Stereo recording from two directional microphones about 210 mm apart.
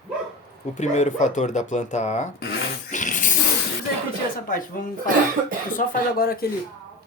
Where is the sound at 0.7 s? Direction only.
35° left (ahead or behind).